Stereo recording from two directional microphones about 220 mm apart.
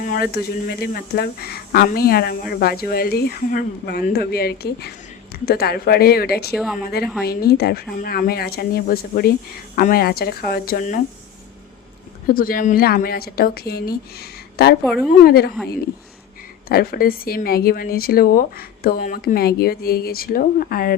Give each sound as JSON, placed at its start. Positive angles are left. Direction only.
{"t": 0.0, "sound": "speech", "side_deg": 45}
{"t": 7.0, "sound": "speech", "side_deg": 0}
{"t": 7.3, "sound": "speech", "side_deg": 45}
{"t": 12.3, "sound": "speech", "side_deg": 40}
{"t": 14.8, "sound": "speech", "side_deg": 0}
{"t": 15.2, "sound": "speech", "side_deg": 45}
{"t": 16.6, "sound": "speech", "side_deg": 40}